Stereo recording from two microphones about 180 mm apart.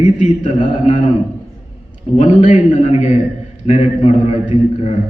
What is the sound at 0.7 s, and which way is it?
Speech, 25° left (ahead or behind).